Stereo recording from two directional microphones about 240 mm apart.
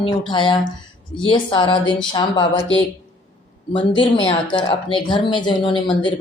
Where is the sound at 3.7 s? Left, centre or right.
Left.